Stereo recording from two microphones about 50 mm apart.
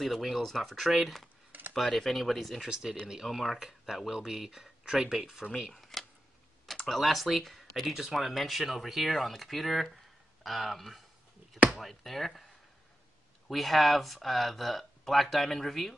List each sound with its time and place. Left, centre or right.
0.0 s speech: centre
1.5 s a sound: right
2.0 s speech: centre
2.7 s speech: centre
5.7 s a sound: centre
6.9 s speech: centre
13.5 s speech: centre